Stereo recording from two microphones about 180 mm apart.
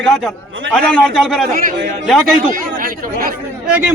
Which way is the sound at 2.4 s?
50° right (ahead or behind).